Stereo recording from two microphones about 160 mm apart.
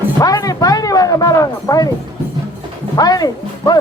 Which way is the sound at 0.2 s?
20° left (ahead or behind).